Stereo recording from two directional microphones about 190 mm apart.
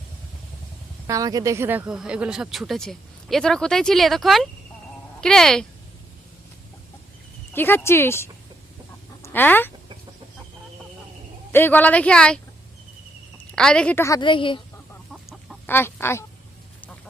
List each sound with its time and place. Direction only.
1.0 s speech: 20° right (ahead or behind); by 5.6 s 5° left (ahead or behind)
7.5 s a woman's voice: 10° left (ahead or behind)
11.5 s a woman's voice: 10° left (ahead or behind)
13.6 s a woman's voice: 5° left (ahead or behind); by 14.6 s 25° left (ahead or behind)
15.1 s chicken: centre (ahead or behind)
15.6 s a woman's voice: 10° left (ahead or behind)